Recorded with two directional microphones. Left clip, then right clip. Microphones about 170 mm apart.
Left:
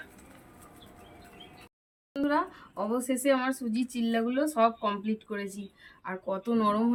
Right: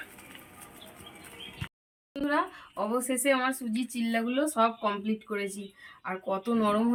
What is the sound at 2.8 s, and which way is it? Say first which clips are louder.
Speech: right 1 dB; 30° left (ahead or behind).